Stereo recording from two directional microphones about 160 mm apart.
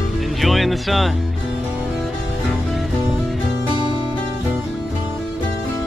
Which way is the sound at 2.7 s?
Centre (ahead or behind).